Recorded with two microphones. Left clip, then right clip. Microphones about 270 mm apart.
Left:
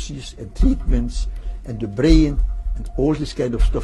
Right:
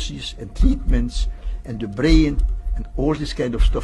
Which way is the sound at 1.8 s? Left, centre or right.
Left.